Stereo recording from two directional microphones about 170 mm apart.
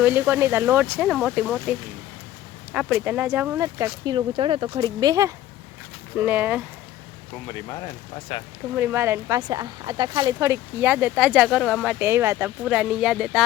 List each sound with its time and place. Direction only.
0.0 s speech: 10° right (ahead or behind)
2.7 s speech: 10° right (ahead or behind)
6.1 s speech: 10° right (ahead or behind)
7.4 s speech: 20° left (ahead or behind)
8.7 s speech: 15° right (ahead or behind)
11.9 s speech: 15° right (ahead or behind)
12.6 s speech: 5° right (ahead or behind)